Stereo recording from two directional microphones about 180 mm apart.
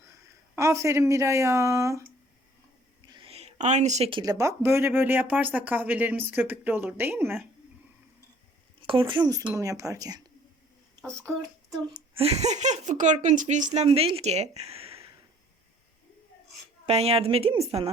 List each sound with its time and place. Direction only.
0.0 s speech: 15° right (ahead or behind)
3.1 s a sound: 30° right (ahead or behind)
4.2 s speech: 20° right (ahead or behind)
8.9 s speech: 30° right (ahead or behind)
12.2 s speech: 35° right (ahead or behind)
16.8 s speech: 35° right (ahead or behind)